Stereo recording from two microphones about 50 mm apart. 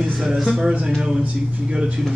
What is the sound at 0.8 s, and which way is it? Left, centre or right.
Speech, centre.